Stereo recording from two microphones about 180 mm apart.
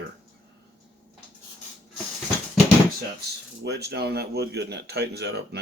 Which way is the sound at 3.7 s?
65° right (ahead or behind).